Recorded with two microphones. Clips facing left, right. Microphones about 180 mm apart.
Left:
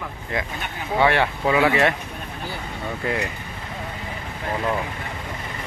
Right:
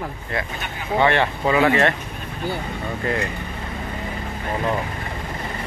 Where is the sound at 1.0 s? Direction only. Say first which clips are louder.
Even; 10° left (ahead or behind).